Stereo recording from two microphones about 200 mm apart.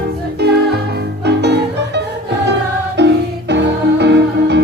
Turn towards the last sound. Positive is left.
turn(degrees=-60)  # may be behind; listen again after turning